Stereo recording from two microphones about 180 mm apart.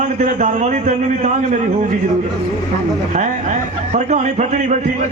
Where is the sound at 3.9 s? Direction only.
40° right (ahead or behind).